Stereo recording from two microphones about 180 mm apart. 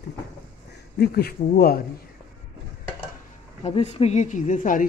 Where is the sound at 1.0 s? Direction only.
60° left (ahead or behind).